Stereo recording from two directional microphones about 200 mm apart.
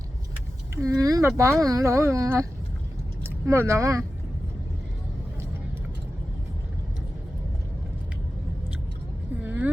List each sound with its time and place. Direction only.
0.8 s speech: 15° right (ahead or behind)
9.4 s vehicle: 10° right (ahead or behind)